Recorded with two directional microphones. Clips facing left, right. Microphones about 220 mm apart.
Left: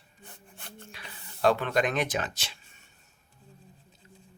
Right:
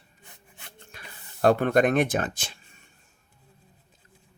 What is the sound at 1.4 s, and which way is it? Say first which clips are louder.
Speech: right 5 dB; 50° right (ahead or behind).